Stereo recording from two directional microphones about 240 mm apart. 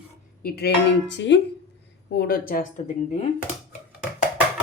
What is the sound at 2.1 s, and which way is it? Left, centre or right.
Speech, left.